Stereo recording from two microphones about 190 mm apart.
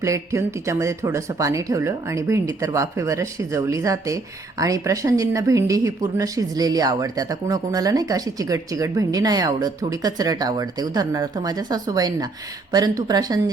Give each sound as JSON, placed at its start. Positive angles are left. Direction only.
{"t": 0.0, "sound": "speech", "side_deg": -15}